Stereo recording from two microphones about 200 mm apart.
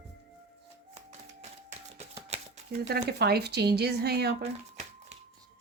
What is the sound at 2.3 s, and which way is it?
Shuffling cards, 30° right (ahead or behind).